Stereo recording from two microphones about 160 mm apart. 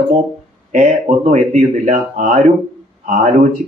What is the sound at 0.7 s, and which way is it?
Speech, 50° right (ahead or behind).